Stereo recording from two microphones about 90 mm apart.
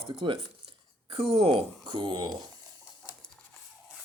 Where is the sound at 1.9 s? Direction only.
60° right (ahead or behind).